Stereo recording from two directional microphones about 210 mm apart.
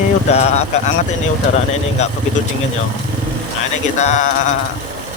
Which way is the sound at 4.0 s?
35° left (ahead or behind).